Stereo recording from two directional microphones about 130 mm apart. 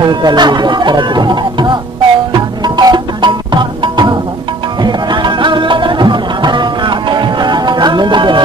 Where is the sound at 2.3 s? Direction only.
35° right (ahead or behind).